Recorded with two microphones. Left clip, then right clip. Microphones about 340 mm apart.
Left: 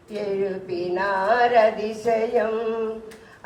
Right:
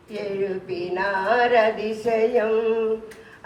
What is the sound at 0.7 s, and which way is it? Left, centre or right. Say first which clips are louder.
Singing: left 2 dB; left.